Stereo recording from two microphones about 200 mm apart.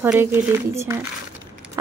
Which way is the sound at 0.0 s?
10° right (ahead or behind).